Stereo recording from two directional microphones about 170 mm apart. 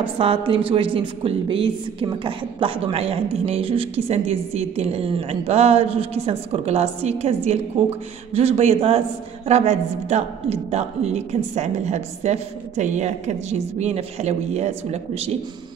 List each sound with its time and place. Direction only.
0.0 s speech: 35° right (ahead or behind)